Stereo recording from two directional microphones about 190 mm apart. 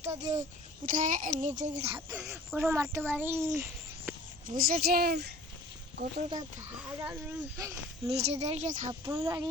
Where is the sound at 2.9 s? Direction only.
10° right (ahead or behind).